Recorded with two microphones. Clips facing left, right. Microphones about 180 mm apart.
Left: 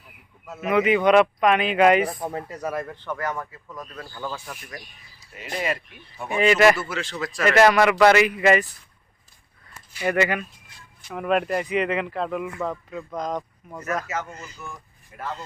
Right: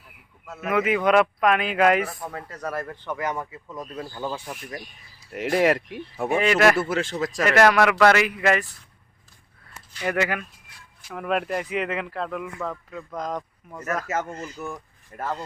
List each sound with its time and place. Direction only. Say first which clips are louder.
0.4 s speech: left 3 dB; centre (ahead or behind)
2.3 s speech: left 4 dB; 15° left (ahead or behind)
2.6 s speech: left 1 dB; centre (ahead or behind)
2.9 s speech: even; 15° right (ahead or behind)
5.3 s speech: right 8 dB; 75° right (ahead or behind)
6.4 s speech: left 3 dB; centre (ahead or behind)
6.7 s speech: right 5 dB; 50° right (ahead or behind)
7.4 s speech: left 2 dB; centre (ahead or behind)
10.1 s speech: left 3 dB; centre (ahead or behind)
13.1 s speech: left 2 dB; 5° right (ahead or behind)
14.1 s speech: right 3 dB; 50° right (ahead or behind)